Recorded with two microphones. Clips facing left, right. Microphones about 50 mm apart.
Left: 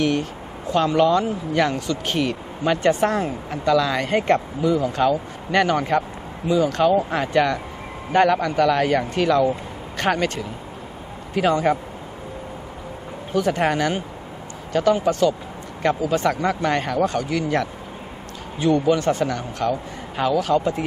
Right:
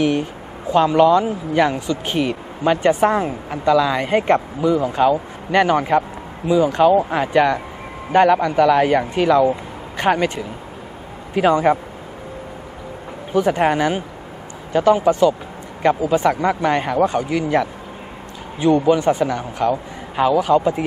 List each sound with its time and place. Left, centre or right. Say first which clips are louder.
0.0 s speech: right 3 dB; centre
13.3 s speech: right 4 dB; centre